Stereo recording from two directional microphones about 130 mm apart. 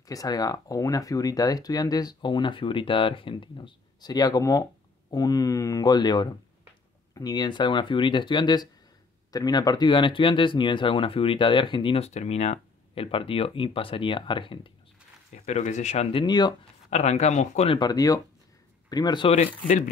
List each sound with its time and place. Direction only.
0.0 s speech: 30° left (ahead or behind)
15.3 s speech: 65° left (ahead or behind)
16.3 s speech: 35° left (ahead or behind)
16.9 s speech: 60° left (ahead or behind)
17.7 s speech: 30° left (ahead or behind)
19.2 s speech: 50° left (ahead or behind)